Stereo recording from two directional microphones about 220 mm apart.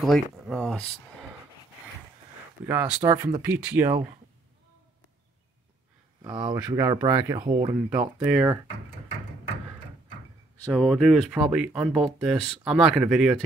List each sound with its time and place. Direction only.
0.0 s speech: centre (ahead or behind)
2.6 s speech: 10° right (ahead or behind)
6.2 s speech: 20° right (ahead or behind)
10.7 s speech: 5° left (ahead or behind)